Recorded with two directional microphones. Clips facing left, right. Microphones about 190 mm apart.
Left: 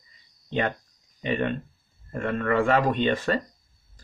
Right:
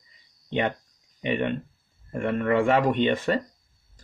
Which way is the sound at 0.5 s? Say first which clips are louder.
Right 1 dB; 20° right (ahead or behind).